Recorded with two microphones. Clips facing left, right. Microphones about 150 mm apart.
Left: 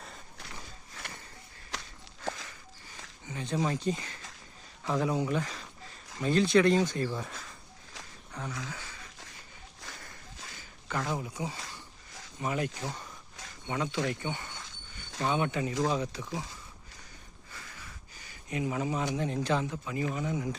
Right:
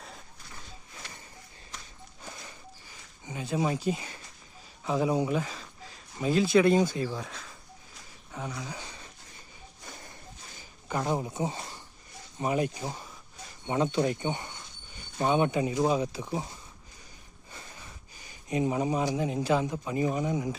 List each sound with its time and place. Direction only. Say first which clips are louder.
1.7 s walk: left 5 dB; 85° left
2.2 s a sound: left 8 dB; 90° left
3.2 s speech: right 2 dB; 10° right (ahead or behind)
5.3 s a sound: right 2 dB; 10° right (ahead or behind)
6.1 s speech: right 1 dB; 5° right (ahead or behind)
8.3 s a sound: right 2 dB; 10° right (ahead or behind)
11.0 s speech: right 7 dB; 25° right (ahead or behind)
17.5 s sniff: right 2 dB; 25° right (ahead or behind)
18.4 s speech: right 4 dB; 25° right (ahead or behind)
19.0 s speech: right 3 dB; 10° right (ahead or behind)
19.7 s speech: right 5 dB; 25° right (ahead or behind)